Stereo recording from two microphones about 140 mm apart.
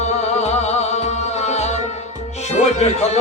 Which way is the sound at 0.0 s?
50° left (ahead or behind).